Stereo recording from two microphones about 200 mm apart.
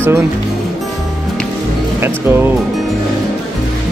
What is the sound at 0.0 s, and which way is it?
Speech, 10° right (ahead or behind).